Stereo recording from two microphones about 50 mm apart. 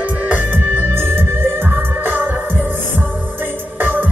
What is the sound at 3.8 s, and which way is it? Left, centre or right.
Music, right.